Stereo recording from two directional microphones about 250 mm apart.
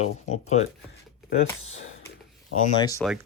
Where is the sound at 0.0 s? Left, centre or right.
Left.